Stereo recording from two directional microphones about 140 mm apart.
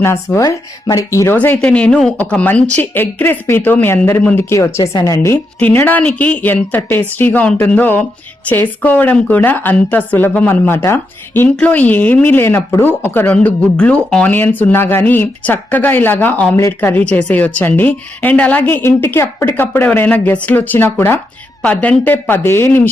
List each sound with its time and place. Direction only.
0.0 s a woman's voice: 20° left (ahead or behind)